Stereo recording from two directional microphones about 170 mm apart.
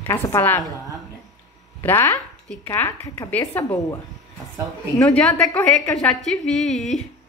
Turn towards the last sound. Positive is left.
turn(degrees=0)  # may be behind; listen again after turning